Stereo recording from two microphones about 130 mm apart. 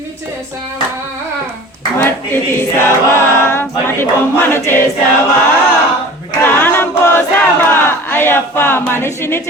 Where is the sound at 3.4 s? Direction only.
20° left (ahead or behind).